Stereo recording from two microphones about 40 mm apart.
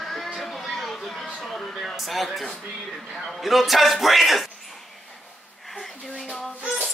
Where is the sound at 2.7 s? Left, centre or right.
Centre.